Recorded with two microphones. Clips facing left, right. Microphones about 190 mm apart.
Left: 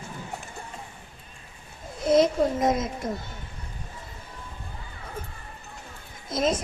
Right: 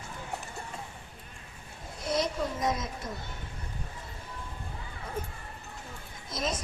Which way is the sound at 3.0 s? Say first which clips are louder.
Left 8 dB; 50° left (ahead or behind).